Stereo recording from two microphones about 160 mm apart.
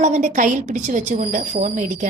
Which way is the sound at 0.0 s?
45° right (ahead or behind).